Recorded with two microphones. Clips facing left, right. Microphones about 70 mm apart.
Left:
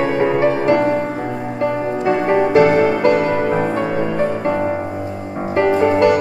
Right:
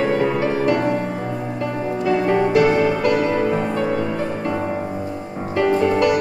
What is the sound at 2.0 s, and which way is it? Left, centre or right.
Music, left.